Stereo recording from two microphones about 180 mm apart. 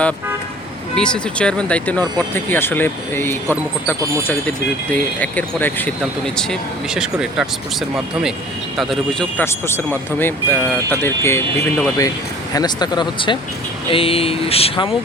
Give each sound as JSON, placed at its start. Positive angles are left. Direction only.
{"t": 0.9, "sound": "speech", "side_deg": 5}
{"t": 9.4, "sound": "speech", "side_deg": 15}